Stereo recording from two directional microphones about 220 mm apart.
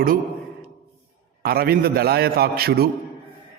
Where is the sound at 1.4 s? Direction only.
45° right (ahead or behind).